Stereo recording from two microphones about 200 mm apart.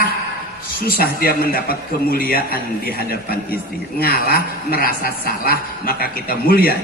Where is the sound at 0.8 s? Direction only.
45° left (ahead or behind).